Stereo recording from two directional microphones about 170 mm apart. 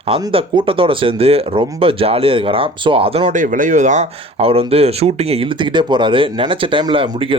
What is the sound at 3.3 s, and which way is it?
Speech, 50° right (ahead or behind).